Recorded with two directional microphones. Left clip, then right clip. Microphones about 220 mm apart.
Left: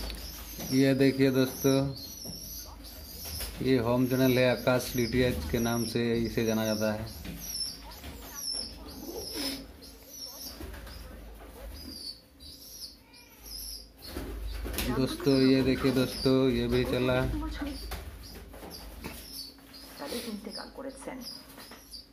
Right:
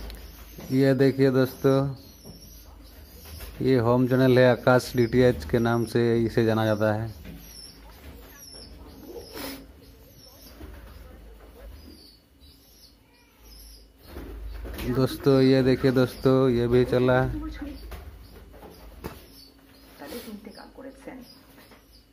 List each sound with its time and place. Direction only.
0.7 s speech: 25° right (ahead or behind)
3.6 s speech: 25° right (ahead or behind)
15.0 s speech: 35° right (ahead or behind)
20.5 s rodents: 10° left (ahead or behind)